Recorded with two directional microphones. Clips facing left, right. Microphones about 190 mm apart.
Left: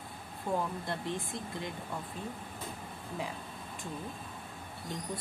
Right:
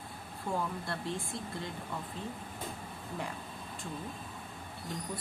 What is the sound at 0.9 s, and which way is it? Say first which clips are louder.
Speech: left 1 dB; 20° left (ahead or behind).